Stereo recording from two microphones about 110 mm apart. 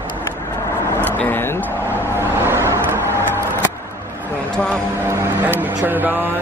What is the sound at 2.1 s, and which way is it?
Vehicle, 20° right (ahead or behind).